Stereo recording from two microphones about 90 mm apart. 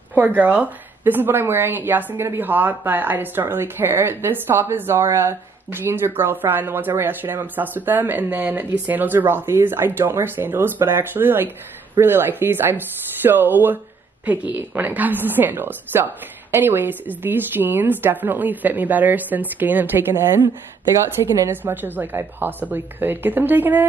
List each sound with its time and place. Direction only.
0.1 s a woman's voice: 20° right (ahead or behind)
21.5 s a woman's voice: 25° right (ahead or behind)